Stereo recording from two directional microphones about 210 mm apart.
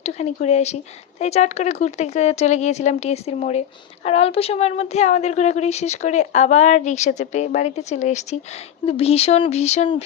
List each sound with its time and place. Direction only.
0.0 s a woman's voice: 30° left (ahead or behind)